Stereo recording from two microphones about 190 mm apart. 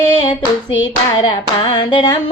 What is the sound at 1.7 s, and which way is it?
Female singing, 25° left (ahead or behind).